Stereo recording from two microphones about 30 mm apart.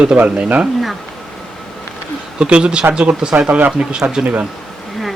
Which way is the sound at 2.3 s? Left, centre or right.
Right.